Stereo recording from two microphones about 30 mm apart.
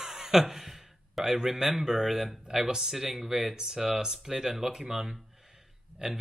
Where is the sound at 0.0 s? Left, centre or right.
Centre.